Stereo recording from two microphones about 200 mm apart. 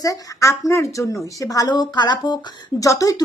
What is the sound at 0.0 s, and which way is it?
Speech, 15° left (ahead or behind).